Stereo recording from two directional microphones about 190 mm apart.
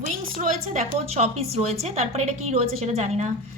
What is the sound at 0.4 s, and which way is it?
A woman's voice, 40° right (ahead or behind).